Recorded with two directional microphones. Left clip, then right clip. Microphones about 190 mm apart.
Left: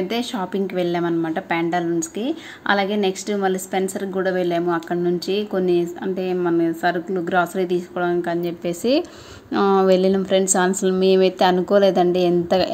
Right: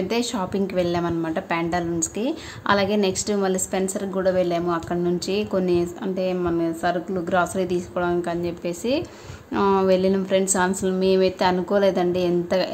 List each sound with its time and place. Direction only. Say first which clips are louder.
0.1 s a woman's voice: even; 5° left (ahead or behind); by 12.6 s 20° left (ahead or behind)